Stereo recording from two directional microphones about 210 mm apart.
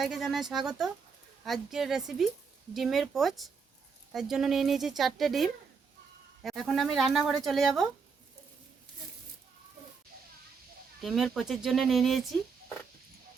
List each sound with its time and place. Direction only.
0.0 s speech: centre (ahead or behind)
11.0 s speech: centre (ahead or behind)